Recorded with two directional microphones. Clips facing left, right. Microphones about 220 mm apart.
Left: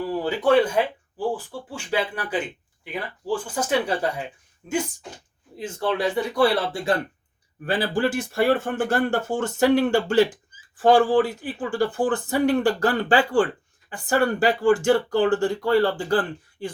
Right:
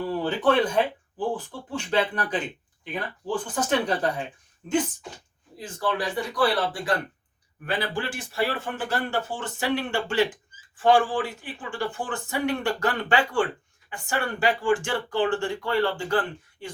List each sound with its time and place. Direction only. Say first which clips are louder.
0.1 s speech: left 4 dB; 10° left (ahead or behind)
5.5 s speech: left 3 dB; 25° left (ahead or behind)